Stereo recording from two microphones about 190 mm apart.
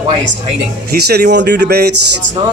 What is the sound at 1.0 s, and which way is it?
Speech, 55° right (ahead or behind).